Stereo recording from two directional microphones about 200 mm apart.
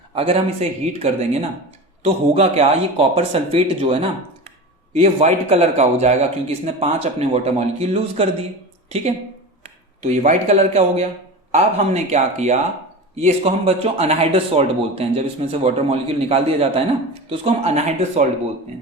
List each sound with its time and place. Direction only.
0.1 s a man's voice: 30° right (ahead or behind)
4.9 s a man's voice: 30° right (ahead or behind)
10.0 s a man's voice: 35° right (ahead or behind)